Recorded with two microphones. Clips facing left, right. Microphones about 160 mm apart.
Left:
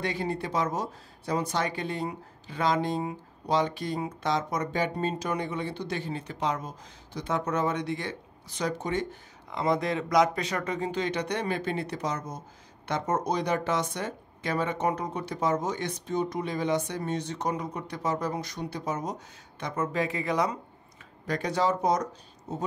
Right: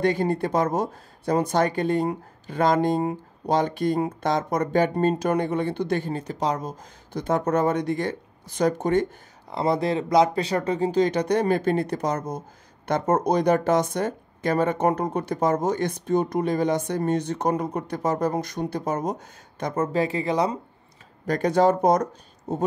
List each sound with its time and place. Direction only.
0.0 s speech: 50° right (ahead or behind)
9.5 s speech: 35° right (ahead or behind)
21.3 s speech: 50° right (ahead or behind)